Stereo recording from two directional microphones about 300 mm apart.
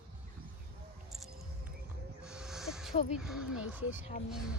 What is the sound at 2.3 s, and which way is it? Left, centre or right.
Crow, centre.